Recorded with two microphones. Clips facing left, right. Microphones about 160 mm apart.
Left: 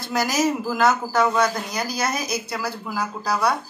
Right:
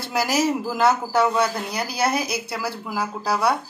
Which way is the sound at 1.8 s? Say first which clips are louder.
Right 5 dB; 30° right (ahead or behind).